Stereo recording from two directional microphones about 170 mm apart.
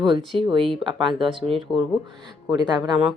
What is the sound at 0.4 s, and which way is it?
Speech, 30° right (ahead or behind).